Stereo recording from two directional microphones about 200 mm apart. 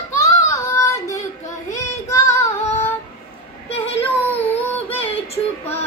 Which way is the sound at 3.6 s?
30° left (ahead or behind).